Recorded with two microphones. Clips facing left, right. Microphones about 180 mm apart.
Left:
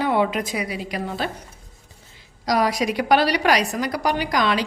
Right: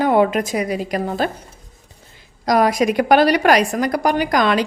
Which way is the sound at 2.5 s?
50° right (ahead or behind).